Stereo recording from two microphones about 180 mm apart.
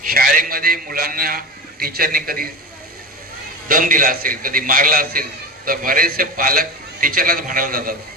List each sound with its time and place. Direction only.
0.1 s a man's voice: 55° right (ahead or behind)
3.7 s a man's voice: 50° right (ahead or behind)